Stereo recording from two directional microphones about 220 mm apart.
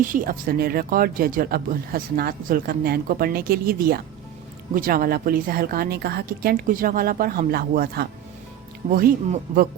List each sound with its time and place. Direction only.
0.0 s speech: 40° right (ahead or behind)